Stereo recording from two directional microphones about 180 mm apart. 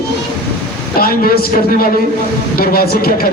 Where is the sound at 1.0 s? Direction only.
55° left (ahead or behind).